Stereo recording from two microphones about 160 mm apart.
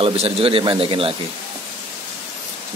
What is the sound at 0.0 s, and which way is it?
Speech, 35° right (ahead or behind).